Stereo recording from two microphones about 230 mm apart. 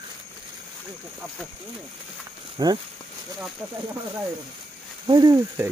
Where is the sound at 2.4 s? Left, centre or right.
Right.